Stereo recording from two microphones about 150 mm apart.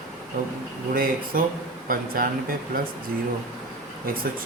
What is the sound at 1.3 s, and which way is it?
Speech, 70° right (ahead or behind).